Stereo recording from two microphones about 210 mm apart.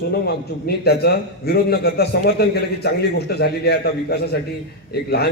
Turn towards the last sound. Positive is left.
turn(degrees=50)  # may be behind; listen again after turning